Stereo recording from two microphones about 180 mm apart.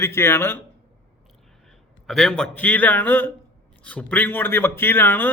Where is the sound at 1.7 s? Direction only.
5° left (ahead or behind).